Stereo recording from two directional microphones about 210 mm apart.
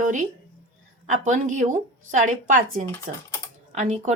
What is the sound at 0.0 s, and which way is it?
A woman's voice, 35° right (ahead or behind).